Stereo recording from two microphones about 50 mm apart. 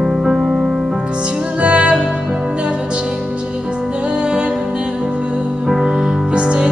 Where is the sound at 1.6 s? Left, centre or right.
Right.